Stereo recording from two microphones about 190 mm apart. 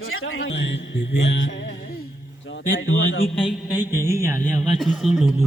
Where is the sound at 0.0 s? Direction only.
90° left; by 1.4 s 60° left (ahead or behind).